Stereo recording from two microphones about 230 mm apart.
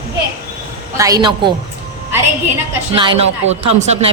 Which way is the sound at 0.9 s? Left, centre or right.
Centre.